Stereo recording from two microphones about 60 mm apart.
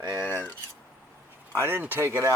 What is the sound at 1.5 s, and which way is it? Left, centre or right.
Speech, right.